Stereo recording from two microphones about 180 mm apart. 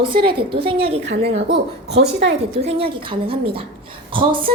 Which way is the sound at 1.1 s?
65° right (ahead or behind).